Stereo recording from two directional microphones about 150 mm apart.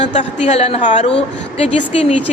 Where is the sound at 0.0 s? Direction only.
50° left (ahead or behind).